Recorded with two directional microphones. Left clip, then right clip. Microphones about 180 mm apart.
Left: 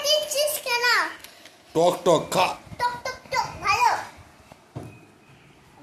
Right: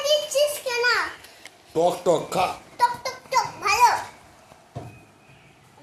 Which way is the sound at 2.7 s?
20° right (ahead or behind).